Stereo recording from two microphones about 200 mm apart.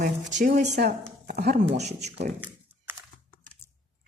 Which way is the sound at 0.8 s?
55° right (ahead or behind).